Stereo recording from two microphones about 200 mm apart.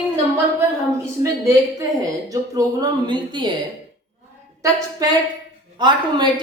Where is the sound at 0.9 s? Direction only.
15° right (ahead or behind).